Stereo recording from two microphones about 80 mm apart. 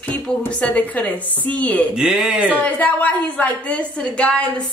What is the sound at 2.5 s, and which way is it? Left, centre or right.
A woman's voice, centre.